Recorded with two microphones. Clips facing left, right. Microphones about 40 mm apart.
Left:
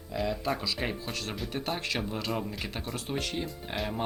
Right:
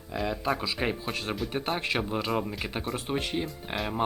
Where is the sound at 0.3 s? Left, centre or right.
Centre.